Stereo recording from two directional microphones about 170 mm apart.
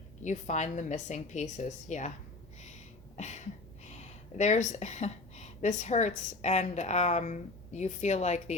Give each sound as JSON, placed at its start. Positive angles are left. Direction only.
{"t": 0.2, "sound": "speech", "side_deg": 45}
{"t": 3.2, "sound": "a sound", "side_deg": 45}
{"t": 4.4, "sound": "speech", "side_deg": 45}